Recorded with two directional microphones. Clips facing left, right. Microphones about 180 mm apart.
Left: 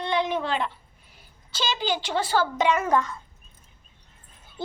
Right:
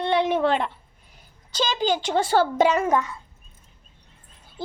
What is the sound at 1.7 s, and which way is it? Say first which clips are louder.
Speech: right 4 dB; 45° right (ahead or behind).